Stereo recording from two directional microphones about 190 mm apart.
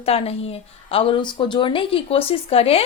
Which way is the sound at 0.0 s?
30° left (ahead or behind).